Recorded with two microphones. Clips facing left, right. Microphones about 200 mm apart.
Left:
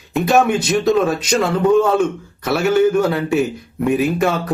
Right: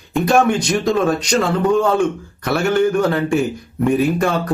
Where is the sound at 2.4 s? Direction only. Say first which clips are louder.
Left 2 dB; 5° left (ahead or behind).